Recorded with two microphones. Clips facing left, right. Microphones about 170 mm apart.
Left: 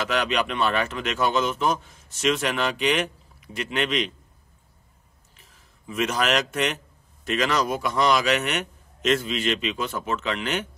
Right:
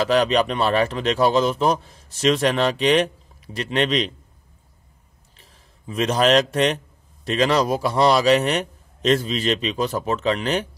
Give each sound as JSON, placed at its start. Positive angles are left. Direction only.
{"t": 0.0, "sound": "speech", "side_deg": -35}
{"t": 5.4, "sound": "a man's voice", "side_deg": -35}